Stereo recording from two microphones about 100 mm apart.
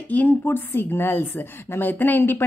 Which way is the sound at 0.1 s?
15° left (ahead or behind).